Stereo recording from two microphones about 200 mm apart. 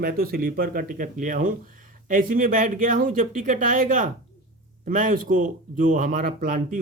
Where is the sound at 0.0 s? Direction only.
50° right (ahead or behind).